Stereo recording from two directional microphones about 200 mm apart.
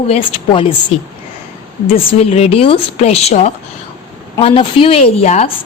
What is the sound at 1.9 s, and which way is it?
A woman's voice, 30° left (ahead or behind).